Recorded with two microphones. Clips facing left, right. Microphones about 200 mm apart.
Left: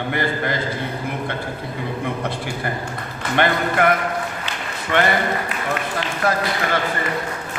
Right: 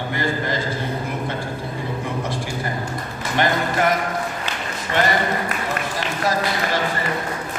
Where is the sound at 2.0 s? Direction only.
60° left (ahead or behind).